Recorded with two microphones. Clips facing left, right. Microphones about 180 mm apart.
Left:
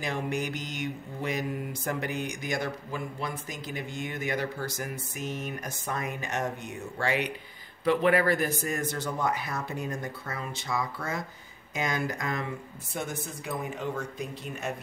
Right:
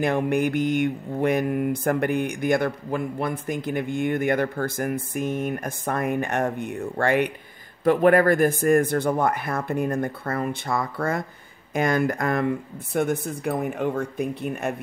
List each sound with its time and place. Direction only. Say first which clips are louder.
0.0 s mantra: right 9 dB; 55° right (ahead or behind)